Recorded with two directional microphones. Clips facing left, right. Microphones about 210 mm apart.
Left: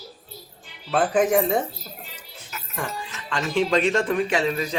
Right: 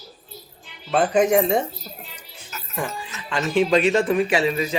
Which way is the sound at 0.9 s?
Centre (ahead or behind).